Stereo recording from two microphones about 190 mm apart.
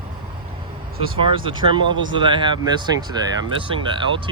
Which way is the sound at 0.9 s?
30° right (ahead or behind).